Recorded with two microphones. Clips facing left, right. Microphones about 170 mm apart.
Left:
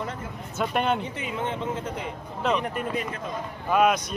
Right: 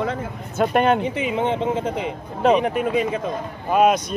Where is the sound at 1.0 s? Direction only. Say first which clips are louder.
Right 9 dB; 90° right.